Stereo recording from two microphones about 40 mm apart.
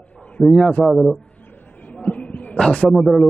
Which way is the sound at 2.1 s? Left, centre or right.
Left.